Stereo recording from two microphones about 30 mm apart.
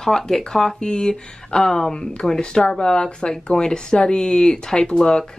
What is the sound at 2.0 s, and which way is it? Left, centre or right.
Speech, left.